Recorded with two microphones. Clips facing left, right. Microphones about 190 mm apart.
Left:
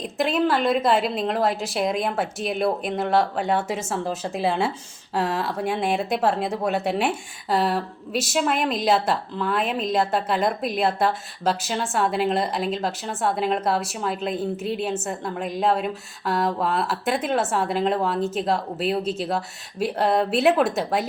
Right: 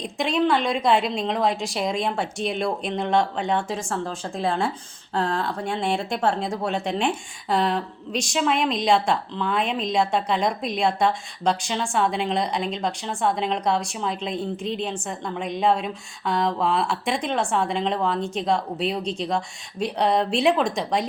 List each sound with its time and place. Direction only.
0.0 s a woman's voice: centre (ahead or behind)